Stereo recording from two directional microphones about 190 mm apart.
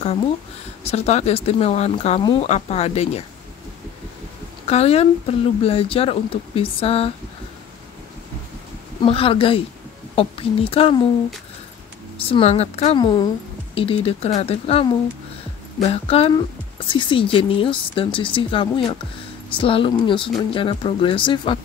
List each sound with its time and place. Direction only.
0.8 s speech: 35° left (ahead or behind)
4.6 s speech: 35° left (ahead or behind)
9.0 s speech: 30° left (ahead or behind)
12.2 s speech: 30° left (ahead or behind)